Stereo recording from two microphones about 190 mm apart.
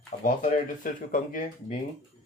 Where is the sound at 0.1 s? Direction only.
45° left (ahead or behind).